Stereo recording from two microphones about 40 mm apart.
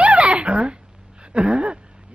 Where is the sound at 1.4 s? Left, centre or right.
Right.